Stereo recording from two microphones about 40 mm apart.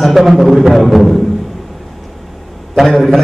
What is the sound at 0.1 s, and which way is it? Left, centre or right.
A man's voice, centre.